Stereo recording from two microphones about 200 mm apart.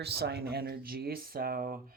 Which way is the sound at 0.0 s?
55° right (ahead or behind).